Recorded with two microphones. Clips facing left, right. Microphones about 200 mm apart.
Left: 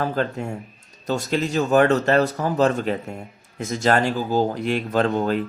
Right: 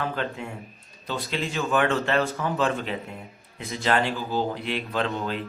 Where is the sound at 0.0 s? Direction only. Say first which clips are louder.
Left 6 dB; 40° left (ahead or behind).